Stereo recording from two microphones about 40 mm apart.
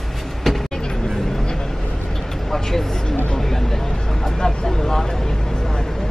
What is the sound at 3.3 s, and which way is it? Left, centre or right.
Vehicle, centre.